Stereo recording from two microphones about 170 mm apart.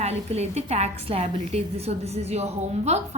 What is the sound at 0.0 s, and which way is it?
A woman's voice, 40° right (ahead or behind).